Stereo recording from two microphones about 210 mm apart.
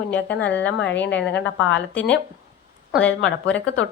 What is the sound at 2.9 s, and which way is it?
Speech, 5° left (ahead or behind).